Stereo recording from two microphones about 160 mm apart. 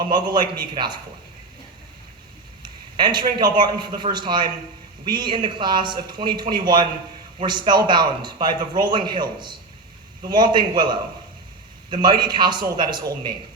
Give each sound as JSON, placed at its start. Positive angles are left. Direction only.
{"t": 0.1, "sound": "a man's voice", "side_deg": -25}
{"t": 3.0, "sound": "a man's voice", "side_deg": -25}